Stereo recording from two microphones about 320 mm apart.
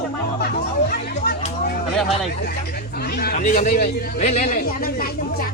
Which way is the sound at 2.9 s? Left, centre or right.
Left.